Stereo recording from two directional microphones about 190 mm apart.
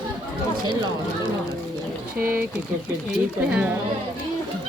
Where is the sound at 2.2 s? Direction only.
10° right (ahead or behind).